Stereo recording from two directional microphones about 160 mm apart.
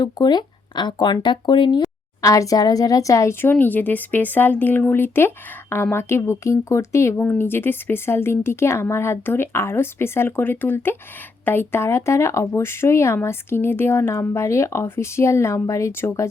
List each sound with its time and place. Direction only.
0.0 s speech: 25° left (ahead or behind)